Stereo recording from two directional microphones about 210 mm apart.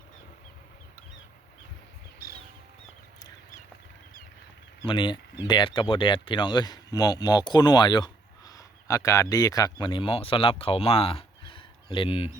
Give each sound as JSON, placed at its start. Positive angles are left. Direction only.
{"t": 4.9, "sound": "speech", "side_deg": 25}